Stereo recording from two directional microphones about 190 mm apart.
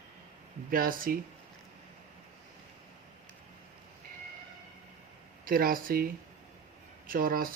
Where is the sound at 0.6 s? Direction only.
50° right (ahead or behind).